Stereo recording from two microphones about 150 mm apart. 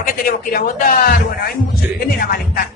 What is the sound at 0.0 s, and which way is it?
A man's voice, 70° left (ahead or behind).